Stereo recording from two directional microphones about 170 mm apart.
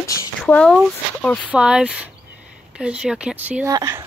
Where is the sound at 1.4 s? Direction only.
5° right (ahead or behind).